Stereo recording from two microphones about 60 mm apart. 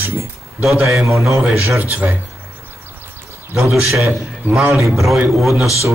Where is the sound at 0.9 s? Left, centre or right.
Centre.